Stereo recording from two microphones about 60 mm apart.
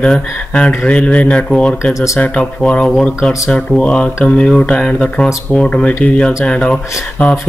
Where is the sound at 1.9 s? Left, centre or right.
Left.